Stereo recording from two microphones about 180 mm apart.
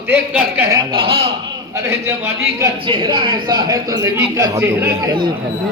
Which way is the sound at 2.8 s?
25° right (ahead or behind).